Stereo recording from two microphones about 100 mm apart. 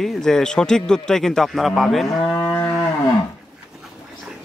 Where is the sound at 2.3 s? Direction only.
20° left (ahead or behind).